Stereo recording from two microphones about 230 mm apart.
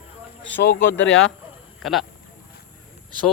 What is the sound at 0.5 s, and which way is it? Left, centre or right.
Speech, left.